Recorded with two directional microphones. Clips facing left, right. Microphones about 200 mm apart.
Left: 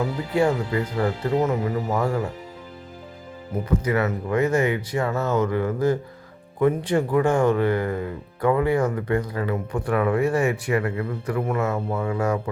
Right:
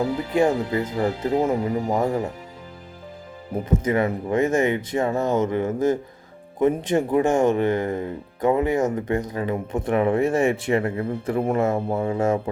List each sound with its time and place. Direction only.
0.0 s speech: 25° right (ahead or behind)
3.8 s speech: 25° right (ahead or behind)